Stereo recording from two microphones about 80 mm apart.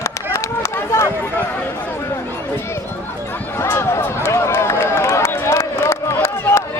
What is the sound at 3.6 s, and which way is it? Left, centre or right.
Run, left.